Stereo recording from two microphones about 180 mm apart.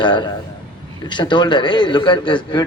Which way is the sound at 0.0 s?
25° left (ahead or behind).